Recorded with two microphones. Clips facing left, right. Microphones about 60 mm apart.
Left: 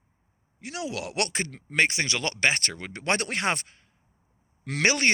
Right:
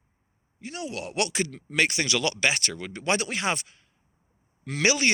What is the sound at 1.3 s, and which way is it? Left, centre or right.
Speech, left.